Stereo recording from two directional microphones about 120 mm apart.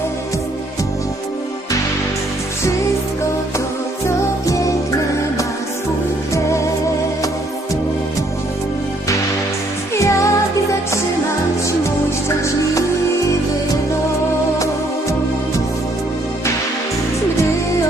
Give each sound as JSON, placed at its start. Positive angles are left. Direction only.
{"t": 6.3, "sound": "music", "side_deg": 25}
{"t": 9.9, "sound": "music", "side_deg": 25}